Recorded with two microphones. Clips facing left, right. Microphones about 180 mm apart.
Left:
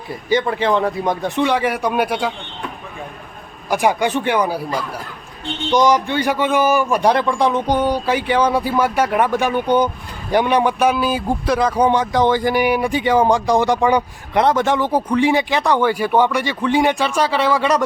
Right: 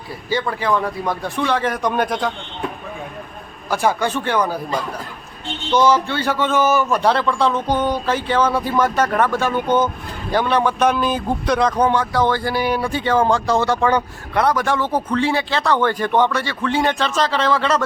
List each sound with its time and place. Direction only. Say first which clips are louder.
0.3 s a man's voice: left 3 dB; 20° left (ahead or behind)
3.7 s speech: left 2 dB; 15° left (ahead or behind)